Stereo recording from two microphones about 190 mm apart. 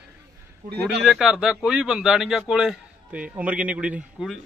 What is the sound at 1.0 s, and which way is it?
Speech, centre (ahead or behind).